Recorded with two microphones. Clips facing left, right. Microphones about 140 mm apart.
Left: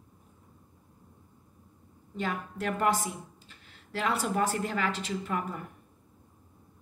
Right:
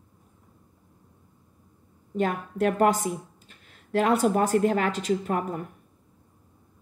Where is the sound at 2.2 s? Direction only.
50° right (ahead or behind).